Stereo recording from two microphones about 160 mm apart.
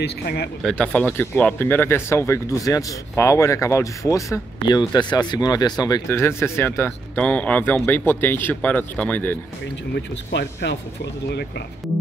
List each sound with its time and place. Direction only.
0.0 s speech: 90° left
0.6 s speech: 5° left (ahead or behind)
9.9 s speech: 90° left